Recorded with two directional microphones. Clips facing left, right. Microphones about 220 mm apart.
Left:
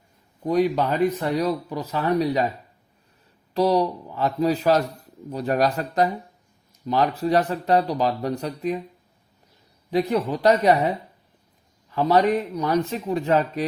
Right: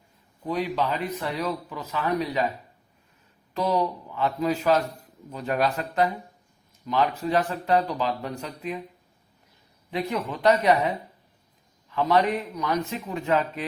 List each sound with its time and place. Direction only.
0.4 s speech: 45° left (ahead or behind)
3.5 s speech: 35° left (ahead or behind)
9.9 s speech: 35° left (ahead or behind)
11.9 s speech: 35° left (ahead or behind)